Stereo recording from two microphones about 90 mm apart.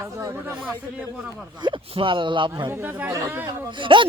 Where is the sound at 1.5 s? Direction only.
60° right (ahead or behind).